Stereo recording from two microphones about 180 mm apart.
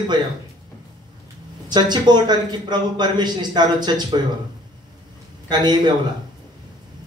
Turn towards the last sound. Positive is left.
turn(degrees=-25)  # may be behind; listen again after turning